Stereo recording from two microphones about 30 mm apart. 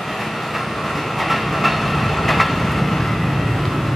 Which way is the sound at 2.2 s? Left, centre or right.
Centre.